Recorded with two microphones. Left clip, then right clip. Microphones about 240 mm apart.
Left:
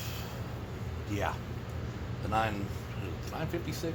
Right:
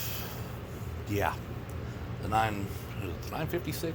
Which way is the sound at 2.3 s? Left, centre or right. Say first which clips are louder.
Right 2 dB; right.